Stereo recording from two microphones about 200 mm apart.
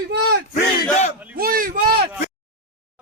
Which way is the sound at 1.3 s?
45° right (ahead or behind).